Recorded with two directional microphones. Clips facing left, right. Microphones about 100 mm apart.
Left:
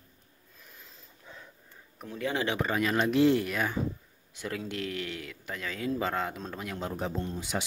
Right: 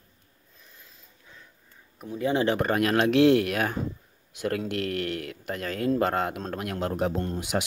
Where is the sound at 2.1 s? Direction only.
20° right (ahead or behind).